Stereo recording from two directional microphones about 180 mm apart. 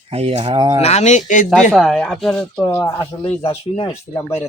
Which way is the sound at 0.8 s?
40° left (ahead or behind).